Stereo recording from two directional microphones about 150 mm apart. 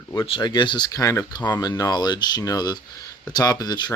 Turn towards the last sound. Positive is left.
turn(degrees=25)  # may be behind; listen again after turning